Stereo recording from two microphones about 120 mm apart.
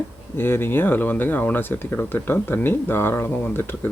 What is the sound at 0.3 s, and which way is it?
Speech, 20° left (ahead or behind).